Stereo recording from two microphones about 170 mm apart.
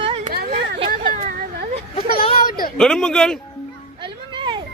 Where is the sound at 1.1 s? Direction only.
55° right (ahead or behind).